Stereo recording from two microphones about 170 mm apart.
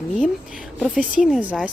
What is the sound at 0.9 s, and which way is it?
Speech, 5° right (ahead or behind).